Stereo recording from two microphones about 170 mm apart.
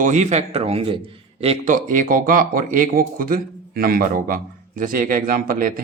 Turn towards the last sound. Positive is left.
turn(degrees=-55)  # may be behind; listen again after turning